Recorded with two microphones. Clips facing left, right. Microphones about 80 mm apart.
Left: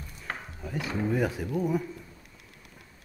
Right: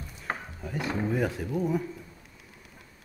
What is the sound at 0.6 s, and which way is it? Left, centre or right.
Speech, centre.